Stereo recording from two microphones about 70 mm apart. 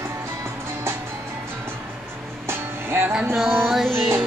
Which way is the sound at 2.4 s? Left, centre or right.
Right.